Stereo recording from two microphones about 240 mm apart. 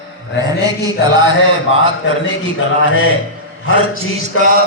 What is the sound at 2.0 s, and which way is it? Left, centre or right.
A man's voice, left.